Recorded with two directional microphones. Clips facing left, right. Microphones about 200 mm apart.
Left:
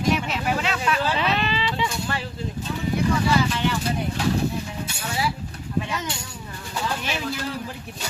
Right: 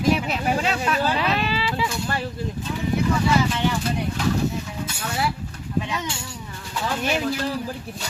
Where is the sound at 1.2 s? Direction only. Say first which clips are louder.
Right 1 dB; 5° right (ahead or behind).